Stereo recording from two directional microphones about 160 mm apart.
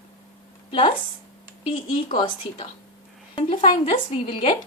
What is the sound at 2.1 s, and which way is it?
A woman's voice, 30° left (ahead or behind).